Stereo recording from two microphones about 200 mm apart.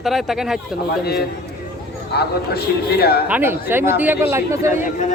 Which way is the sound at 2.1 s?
50° left (ahead or behind).